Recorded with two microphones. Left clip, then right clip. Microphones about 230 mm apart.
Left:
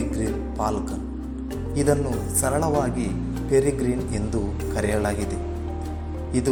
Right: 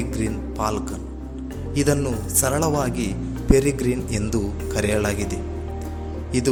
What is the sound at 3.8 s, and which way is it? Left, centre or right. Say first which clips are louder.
A man's voice: right 2 dB; right.